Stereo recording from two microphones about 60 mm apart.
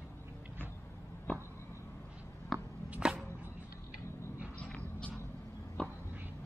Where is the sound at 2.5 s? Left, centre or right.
Centre.